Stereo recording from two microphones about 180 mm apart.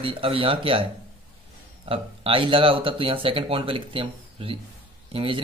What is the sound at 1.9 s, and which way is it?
Speech, 30° right (ahead or behind).